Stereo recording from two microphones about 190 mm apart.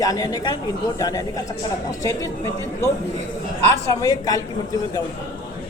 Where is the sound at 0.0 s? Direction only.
20° left (ahead or behind).